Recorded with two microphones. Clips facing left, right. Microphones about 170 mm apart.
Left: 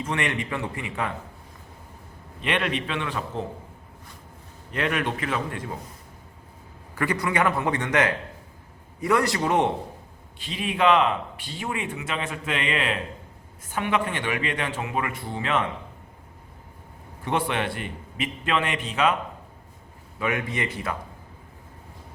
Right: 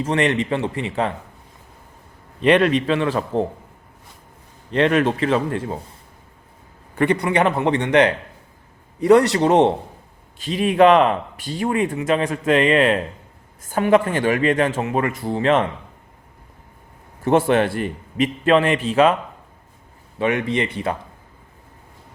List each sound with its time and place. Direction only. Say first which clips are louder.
0.0 s a man's voice: right 8 dB; 35° right (ahead or behind)
2.4 s a man's voice: right 11 dB; 40° right (ahead or behind)
4.7 s a man's voice: right 9 dB; 30° right (ahead or behind)
6.9 s a man's voice: right 7 dB; 25° right (ahead or behind)
9.3 s a man's voice: right 8 dB; 30° right (ahead or behind)
10.3 s a man's voice: right 11 dB; 40° right (ahead or behind)
17.2 s a man's voice: right 10 dB; 45° right (ahead or behind)
20.1 s a man's voice: right 7 dB; 30° right (ahead or behind)